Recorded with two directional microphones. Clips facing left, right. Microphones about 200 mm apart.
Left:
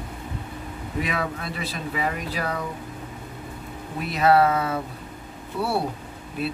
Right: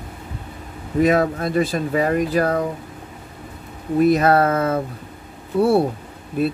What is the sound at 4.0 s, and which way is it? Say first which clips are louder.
Speech: right 4 dB; 45° right (ahead or behind).